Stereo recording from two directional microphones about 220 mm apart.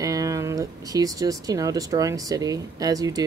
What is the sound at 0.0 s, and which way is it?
Speech, 15° right (ahead or behind).